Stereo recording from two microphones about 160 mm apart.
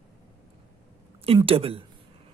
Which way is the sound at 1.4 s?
35° right (ahead or behind).